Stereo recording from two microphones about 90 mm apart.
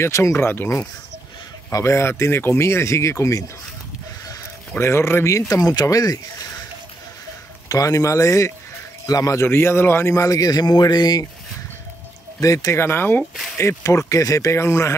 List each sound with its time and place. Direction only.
0.0 s a man's voice: 30° left (ahead or behind)
4.7 s speech: 30° left (ahead or behind)
5.8 s speech: 45° left (ahead or behind)
7.6 s a man's voice: 40° left (ahead or behind)
12.4 s a man's voice: 40° left (ahead or behind)